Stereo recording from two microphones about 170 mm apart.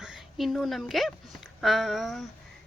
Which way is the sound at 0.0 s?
5° right (ahead or behind).